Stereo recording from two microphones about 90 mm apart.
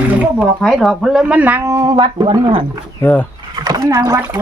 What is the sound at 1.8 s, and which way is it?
Speech, 60° right (ahead or behind).